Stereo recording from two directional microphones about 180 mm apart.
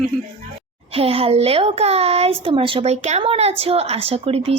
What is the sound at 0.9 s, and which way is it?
Speech, 30° right (ahead or behind).